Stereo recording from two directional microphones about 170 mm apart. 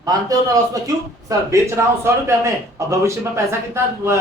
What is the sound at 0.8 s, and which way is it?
A man's voice, 20° right (ahead or behind).